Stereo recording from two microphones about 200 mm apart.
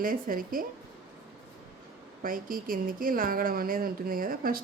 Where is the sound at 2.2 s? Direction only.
45° right (ahead or behind).